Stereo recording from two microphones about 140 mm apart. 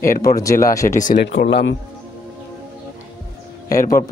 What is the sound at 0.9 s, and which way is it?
Speech, 65° left (ahead or behind).